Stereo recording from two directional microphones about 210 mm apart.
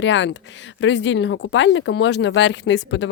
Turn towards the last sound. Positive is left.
turn(degrees=60)  # may be behind; listen again after turning